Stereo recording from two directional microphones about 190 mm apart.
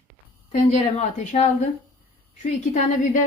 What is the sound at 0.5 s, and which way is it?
A woman's voice, 40° left (ahead or behind).